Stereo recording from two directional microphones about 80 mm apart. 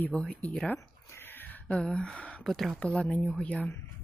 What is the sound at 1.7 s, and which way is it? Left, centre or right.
Speech, centre.